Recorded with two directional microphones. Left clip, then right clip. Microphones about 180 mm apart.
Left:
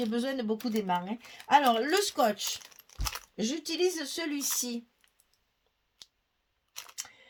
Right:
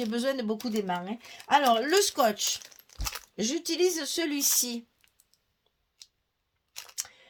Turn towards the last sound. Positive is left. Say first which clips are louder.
# right 1 dB
turn(degrees=0)  # may be behind; listen again after turning